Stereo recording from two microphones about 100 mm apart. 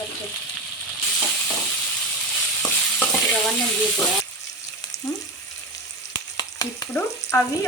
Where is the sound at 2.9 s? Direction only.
15° left (ahead or behind).